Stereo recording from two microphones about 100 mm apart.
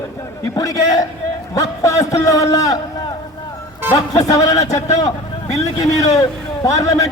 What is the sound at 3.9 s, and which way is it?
A man's voice, 35° left (ahead or behind).